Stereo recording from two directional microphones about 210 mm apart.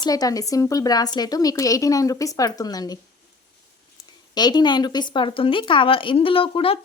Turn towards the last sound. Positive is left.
turn(degrees=25)  # may be behind; listen again after turning